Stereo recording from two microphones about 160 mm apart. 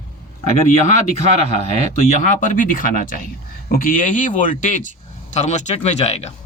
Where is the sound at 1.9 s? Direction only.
45° left (ahead or behind).